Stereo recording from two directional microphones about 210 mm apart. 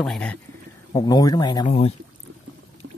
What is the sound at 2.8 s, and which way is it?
Pour, 55° right (ahead or behind).